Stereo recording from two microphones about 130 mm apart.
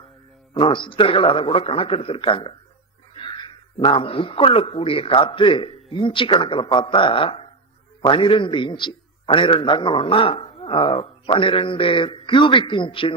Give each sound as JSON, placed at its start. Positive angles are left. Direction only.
{"t": 0.5, "sound": "a man's voice", "side_deg": 40}